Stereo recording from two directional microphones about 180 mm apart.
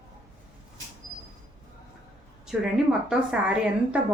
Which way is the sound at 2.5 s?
5° right (ahead or behind).